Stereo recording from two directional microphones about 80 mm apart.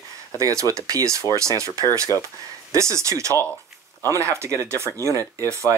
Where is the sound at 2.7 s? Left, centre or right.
Right.